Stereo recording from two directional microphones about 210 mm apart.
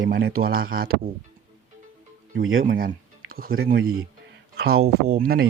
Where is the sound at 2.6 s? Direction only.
40° right (ahead or behind).